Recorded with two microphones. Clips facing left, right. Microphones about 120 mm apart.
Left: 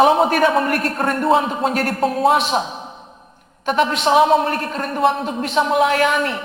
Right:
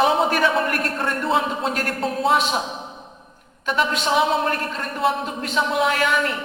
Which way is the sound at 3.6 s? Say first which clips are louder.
Left 5 dB; 45° left (ahead or behind).